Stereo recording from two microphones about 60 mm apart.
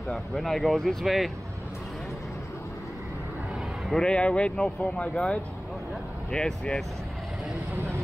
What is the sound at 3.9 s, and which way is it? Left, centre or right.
Speech, centre.